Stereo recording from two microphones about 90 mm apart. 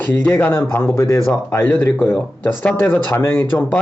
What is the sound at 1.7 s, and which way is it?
A man's voice, 15° left (ahead or behind).